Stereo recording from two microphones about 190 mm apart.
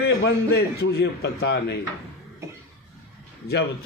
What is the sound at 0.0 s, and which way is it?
A man's voice, 55° left (ahead or behind).